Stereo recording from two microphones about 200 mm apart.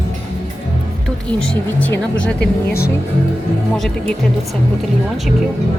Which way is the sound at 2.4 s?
50° left (ahead or behind).